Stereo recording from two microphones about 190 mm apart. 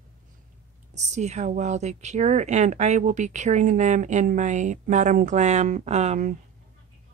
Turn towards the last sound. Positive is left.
turn(degrees=-35)  # may be behind; listen again after turning